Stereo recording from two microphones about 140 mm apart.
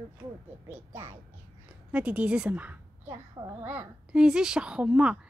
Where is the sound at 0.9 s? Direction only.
20° right (ahead or behind).